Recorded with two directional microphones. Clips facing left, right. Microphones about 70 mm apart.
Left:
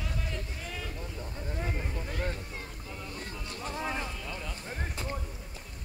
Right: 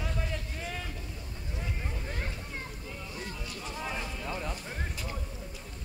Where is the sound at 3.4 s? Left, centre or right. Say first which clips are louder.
Left 2 dB; left.